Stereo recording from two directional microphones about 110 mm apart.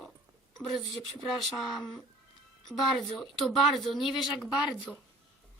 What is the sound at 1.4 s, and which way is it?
Speech, centre (ahead or behind).